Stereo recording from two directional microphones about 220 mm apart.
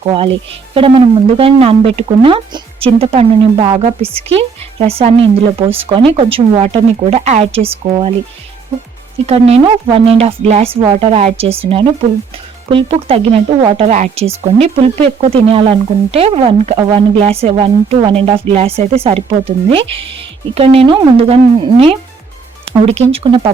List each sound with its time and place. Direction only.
0.7 s speech: 25° right (ahead or behind)
9.2 s speech: 25° right (ahead or behind)
23.1 s speech: 25° right (ahead or behind)